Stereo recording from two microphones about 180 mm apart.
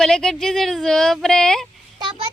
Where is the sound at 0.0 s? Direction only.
5° left (ahead or behind).